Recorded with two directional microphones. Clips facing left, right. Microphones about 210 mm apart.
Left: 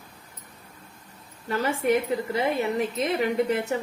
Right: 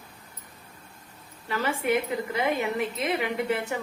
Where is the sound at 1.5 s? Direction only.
40° left (ahead or behind).